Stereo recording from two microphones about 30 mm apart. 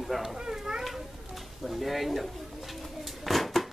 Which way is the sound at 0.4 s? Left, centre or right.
Centre.